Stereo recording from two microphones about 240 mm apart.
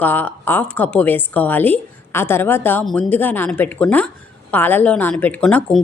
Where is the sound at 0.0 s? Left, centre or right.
Centre.